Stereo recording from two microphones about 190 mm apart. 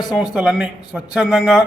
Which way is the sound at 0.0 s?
20° left (ahead or behind).